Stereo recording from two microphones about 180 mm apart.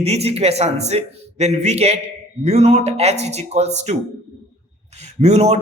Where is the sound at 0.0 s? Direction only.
35° right (ahead or behind).